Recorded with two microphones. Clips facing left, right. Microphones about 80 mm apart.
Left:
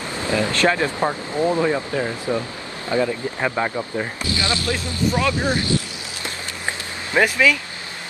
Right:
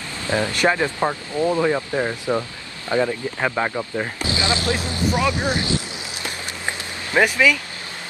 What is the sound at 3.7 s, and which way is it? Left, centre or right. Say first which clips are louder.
Speech: even; centre.